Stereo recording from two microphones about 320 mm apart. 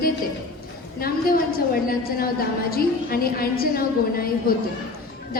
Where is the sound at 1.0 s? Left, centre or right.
Left.